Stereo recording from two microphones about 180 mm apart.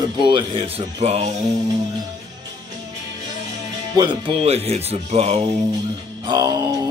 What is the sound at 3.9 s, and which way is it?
Speech, 25° right (ahead or behind).